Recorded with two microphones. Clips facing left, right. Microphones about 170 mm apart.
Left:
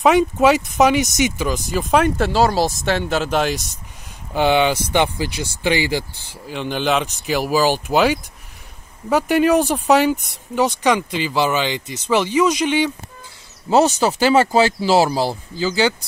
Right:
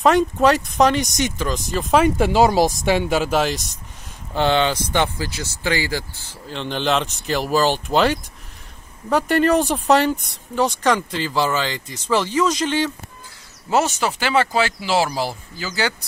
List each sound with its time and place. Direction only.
0.0 s speech: 5° left (ahead or behind)
2.1 s speech: 15° right (ahead or behind); by 6.3 s 20° left (ahead or behind)
6.5 s speech: 5° left (ahead or behind)
11.1 s speech: 15° left (ahead or behind)
13.7 s speech: 35° left (ahead or behind)